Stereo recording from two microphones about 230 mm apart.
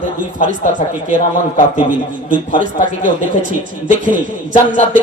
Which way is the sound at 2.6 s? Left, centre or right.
Right.